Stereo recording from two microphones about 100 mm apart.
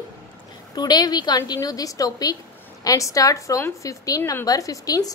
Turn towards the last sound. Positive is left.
turn(degrees=40)  # may be behind; listen again after turning